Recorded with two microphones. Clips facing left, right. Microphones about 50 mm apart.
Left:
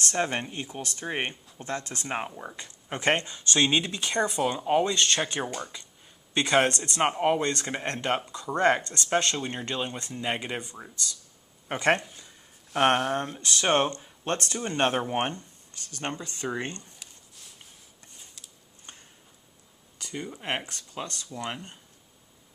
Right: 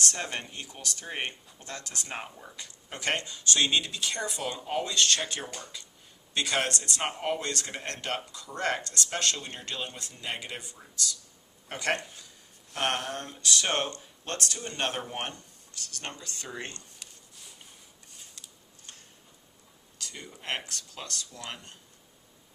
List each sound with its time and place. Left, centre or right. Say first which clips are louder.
0.0 s speech: left 5 dB; left
4.5 s speech: left 3 dB; left
17.0 s a sound: even; centre
20.0 s speech: left 7 dB; left